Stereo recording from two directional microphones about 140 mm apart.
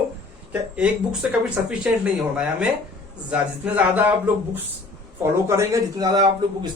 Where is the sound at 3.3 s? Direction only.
10° right (ahead or behind).